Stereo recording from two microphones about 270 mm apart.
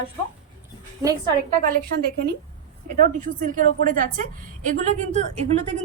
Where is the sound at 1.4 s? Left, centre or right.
Right.